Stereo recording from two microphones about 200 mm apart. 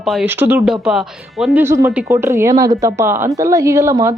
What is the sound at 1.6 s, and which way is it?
A woman's voice, 10° right (ahead or behind).